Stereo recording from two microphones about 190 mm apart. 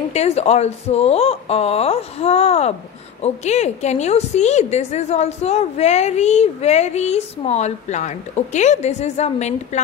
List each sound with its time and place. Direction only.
0.1 s a woman's voice: 35° left (ahead or behind)